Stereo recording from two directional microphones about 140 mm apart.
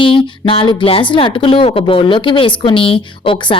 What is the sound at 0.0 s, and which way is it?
A woman's voice, 40° left (ahead or behind).